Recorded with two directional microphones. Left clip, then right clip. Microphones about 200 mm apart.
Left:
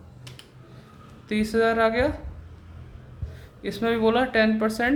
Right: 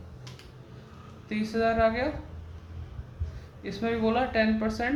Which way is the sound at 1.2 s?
50° left (ahead or behind).